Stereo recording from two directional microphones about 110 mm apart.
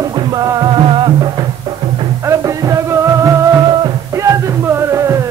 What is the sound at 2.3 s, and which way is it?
Music, 25° right (ahead or behind).